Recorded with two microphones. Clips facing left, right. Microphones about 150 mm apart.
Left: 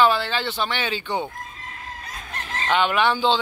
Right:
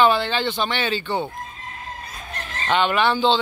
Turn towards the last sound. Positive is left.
turn(degrees=10)  # may be behind; listen again after turning